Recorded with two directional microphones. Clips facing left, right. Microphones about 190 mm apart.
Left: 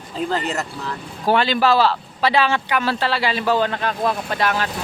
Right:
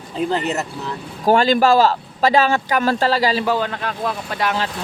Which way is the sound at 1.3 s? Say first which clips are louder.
Right 3 dB; 45° right (ahead or behind).